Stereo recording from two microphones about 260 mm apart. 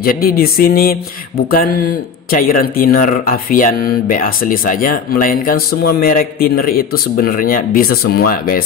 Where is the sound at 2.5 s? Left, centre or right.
Left.